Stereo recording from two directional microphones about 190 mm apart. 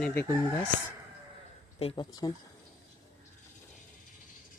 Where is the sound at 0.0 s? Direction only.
10° left (ahead or behind).